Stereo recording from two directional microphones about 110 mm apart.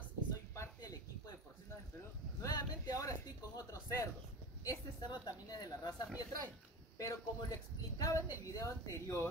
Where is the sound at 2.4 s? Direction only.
35° left (ahead or behind).